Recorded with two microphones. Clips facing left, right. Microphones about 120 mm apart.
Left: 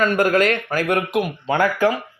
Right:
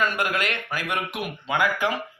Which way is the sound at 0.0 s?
40° left (ahead or behind).